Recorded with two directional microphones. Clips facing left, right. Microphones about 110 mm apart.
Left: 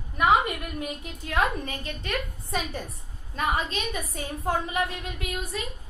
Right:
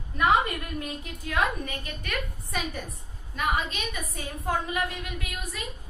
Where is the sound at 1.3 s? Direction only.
30° left (ahead or behind).